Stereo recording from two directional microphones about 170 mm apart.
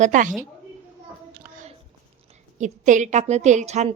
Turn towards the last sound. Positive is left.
turn(degrees=-40)  # may be behind; listen again after turning